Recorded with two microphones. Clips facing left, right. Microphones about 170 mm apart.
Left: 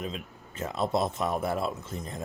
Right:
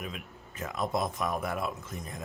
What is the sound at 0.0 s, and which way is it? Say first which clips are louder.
Speech: left 4 dB; 25° left (ahead or behind).